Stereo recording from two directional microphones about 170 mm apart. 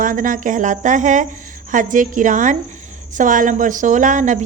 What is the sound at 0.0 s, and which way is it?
A woman's voice, 50° right (ahead or behind).